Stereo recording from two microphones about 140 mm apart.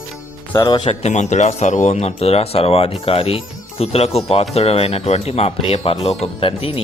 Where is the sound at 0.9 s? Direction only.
55° left (ahead or behind).